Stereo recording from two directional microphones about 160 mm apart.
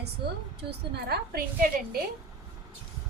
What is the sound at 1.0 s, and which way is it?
Speech, 75° right (ahead or behind).